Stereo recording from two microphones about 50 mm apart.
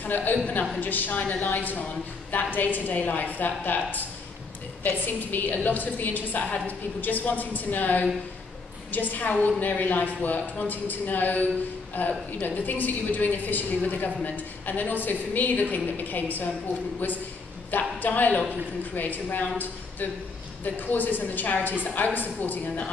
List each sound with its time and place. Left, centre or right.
0.0 s a woman's voice: left
20.6 s a woman's voice: left